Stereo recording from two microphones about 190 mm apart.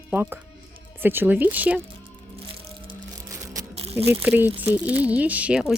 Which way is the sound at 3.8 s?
30° right (ahead or behind).